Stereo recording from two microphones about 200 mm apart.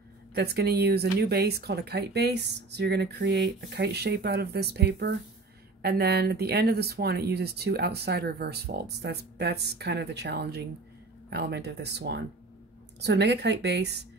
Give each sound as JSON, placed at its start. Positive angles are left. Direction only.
{"t": 0.3, "sound": "speech", "side_deg": -55}